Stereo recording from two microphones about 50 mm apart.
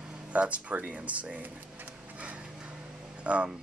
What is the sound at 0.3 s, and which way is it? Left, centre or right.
Speech, right.